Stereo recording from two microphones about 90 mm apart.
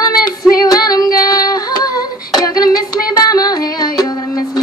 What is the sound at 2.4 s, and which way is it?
Music, 45° left (ahead or behind).